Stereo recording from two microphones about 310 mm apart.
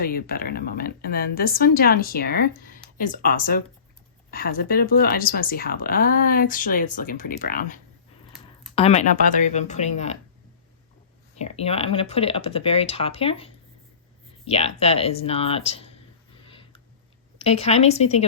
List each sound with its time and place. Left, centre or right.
0.0 s a woman's voice: left
11.3 s a woman's voice: centre
16.5 s a sound: centre
17.3 s a woman's voice: centre